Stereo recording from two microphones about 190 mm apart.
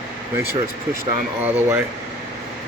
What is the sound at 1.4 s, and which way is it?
Speech, 10° right (ahead or behind).